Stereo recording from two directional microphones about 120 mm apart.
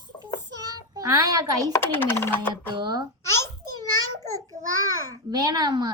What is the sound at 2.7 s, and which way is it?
Speech, 35° right (ahead or behind).